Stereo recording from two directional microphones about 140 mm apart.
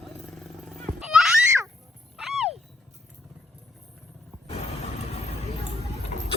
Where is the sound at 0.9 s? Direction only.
5° right (ahead or behind).